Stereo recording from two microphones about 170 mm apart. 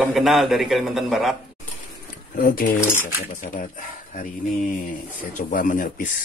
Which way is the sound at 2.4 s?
55° left (ahead or behind).